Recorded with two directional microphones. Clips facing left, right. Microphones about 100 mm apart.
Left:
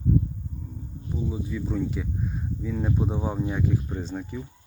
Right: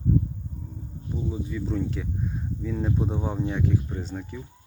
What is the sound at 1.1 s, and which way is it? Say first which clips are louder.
Speech: left 1 dB; 5° left (ahead or behind).